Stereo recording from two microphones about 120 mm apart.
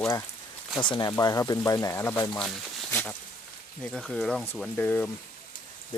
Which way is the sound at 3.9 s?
5° left (ahead or behind).